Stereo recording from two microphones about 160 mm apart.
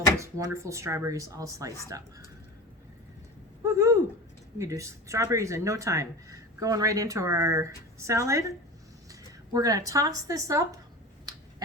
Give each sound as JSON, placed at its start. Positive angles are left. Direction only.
{"t": 0.2, "sound": "speech", "side_deg": -20}
{"t": 3.6, "sound": "a sound", "side_deg": -20}
{"t": 4.5, "sound": "speech", "side_deg": -20}